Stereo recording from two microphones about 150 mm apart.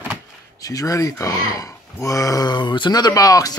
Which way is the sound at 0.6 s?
25° left (ahead or behind).